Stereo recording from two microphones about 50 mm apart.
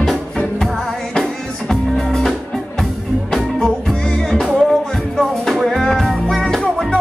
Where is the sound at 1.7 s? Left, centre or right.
Centre.